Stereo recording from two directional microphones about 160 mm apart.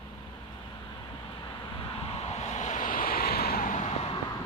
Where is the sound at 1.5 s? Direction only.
35° left (ahead or behind).